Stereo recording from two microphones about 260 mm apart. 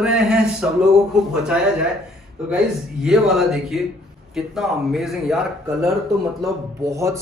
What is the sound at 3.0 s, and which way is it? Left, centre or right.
A man's voice, centre.